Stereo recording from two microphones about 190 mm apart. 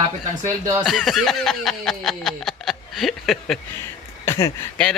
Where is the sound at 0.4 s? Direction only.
15° right (ahead or behind).